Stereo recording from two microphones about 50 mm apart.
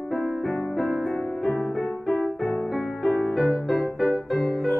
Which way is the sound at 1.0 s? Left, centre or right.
Left.